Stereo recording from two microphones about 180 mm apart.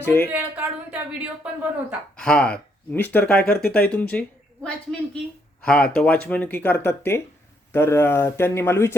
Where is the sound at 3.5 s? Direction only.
60° left (ahead or behind).